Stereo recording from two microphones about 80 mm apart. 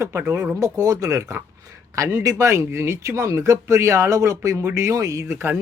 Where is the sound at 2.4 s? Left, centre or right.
Right.